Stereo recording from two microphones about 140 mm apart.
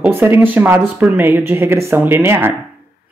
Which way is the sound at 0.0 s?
15° right (ahead or behind).